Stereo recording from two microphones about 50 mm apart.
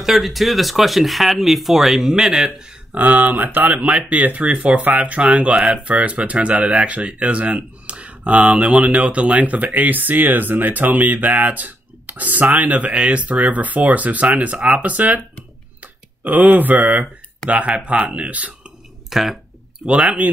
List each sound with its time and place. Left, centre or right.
0.0 s speech: centre
2.9 s speech: right
19.0 s speech: centre
19.9 s speech: right